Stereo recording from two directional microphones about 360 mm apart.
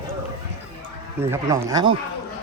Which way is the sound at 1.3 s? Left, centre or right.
Centre.